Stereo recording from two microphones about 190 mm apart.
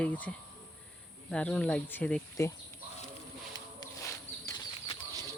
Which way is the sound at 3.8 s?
15° left (ahead or behind).